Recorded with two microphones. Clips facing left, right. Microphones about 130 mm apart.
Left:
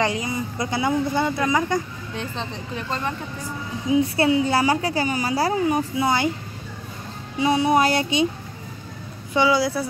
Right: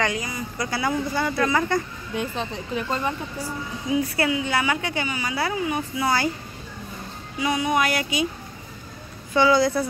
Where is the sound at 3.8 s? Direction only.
25° left (ahead or behind).